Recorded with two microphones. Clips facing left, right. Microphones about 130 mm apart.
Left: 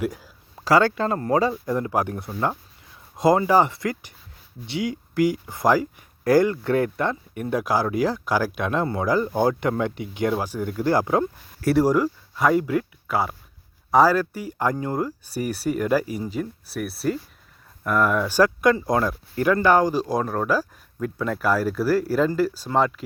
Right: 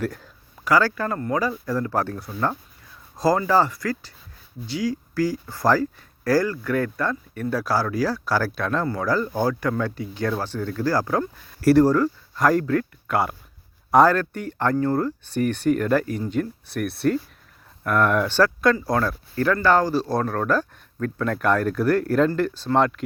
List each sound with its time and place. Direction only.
0.0 s speech: 10° left (ahead or behind)
0.6 s speech: 25° left (ahead or behind)
11.6 s speech: centre (ahead or behind)
11.9 s speech: 10° left (ahead or behind)
18.3 s speech: 15° left (ahead or behind)